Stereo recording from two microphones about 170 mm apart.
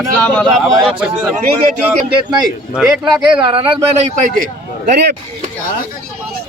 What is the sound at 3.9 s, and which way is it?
Speech, 45° right (ahead or behind).